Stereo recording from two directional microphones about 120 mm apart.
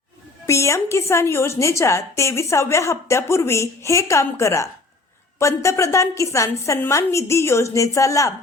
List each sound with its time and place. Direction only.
0.4 s a woman's voice: 25° left (ahead or behind)